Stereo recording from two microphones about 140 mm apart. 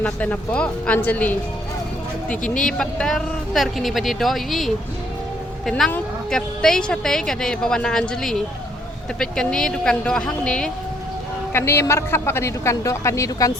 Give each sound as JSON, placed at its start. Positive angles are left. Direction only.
{"t": 0.0, "sound": "a woman's voice", "side_deg": 10}
{"t": 11.5, "sound": "a man's voice", "side_deg": 20}